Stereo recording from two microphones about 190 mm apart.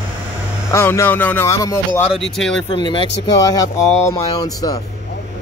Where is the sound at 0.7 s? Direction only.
15° left (ahead or behind).